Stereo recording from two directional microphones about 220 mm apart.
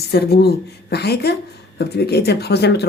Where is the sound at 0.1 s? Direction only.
45° left (ahead or behind).